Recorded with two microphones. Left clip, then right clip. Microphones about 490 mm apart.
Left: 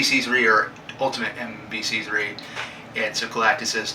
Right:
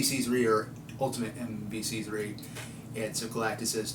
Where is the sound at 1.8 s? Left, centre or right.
Right.